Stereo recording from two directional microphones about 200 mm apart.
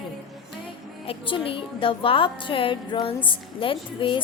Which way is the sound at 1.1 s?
25° left (ahead or behind).